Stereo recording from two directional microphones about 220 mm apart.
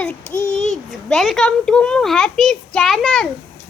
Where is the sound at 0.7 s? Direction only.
Centre (ahead or behind).